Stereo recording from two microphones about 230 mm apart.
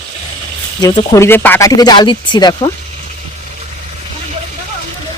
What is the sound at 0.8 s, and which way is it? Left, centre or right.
Speech, centre.